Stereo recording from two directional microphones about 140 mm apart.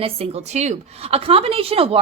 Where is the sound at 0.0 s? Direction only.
45° right (ahead or behind).